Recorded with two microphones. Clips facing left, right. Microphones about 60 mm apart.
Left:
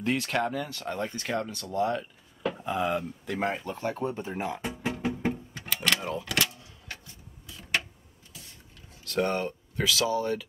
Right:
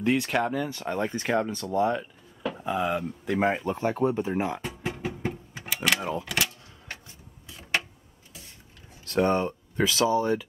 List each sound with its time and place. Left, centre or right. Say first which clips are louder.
0.0 s speech: right 3 dB; centre
3.0 s speech: right 5 dB; centre
5.5 s vehicle: right 1 dB; centre
5.9 s a sound: right 2 dB; centre
9.0 s speech: right 4 dB; right